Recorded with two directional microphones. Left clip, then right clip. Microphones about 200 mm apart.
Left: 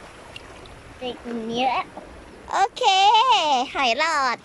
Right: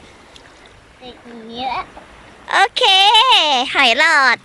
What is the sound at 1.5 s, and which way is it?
Speech, 10° left (ahead or behind).